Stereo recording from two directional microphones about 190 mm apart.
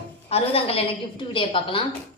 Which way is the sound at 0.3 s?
30° left (ahead or behind).